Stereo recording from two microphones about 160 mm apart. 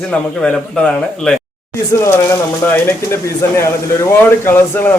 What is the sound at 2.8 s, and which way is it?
Speech, 15° left (ahead or behind).